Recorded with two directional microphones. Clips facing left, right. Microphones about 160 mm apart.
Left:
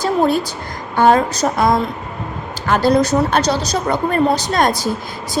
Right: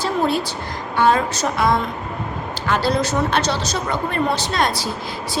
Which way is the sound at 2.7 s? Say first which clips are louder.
Left 6 dB; 45° left (ahead or behind).